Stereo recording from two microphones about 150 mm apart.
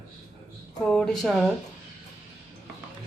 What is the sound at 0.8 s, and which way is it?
Speech, 5° left (ahead or behind).